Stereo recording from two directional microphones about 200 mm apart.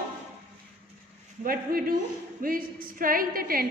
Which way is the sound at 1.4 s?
45° right (ahead or behind).